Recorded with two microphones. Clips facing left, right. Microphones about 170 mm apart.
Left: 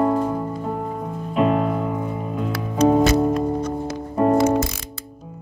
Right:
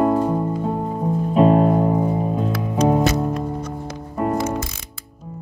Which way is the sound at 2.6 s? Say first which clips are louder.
Left 3 dB; 15° right (ahead or behind).